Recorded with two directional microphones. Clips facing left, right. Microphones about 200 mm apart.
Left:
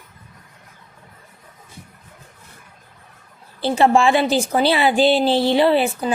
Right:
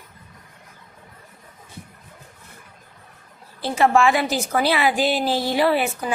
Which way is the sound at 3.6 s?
30° left (ahead or behind).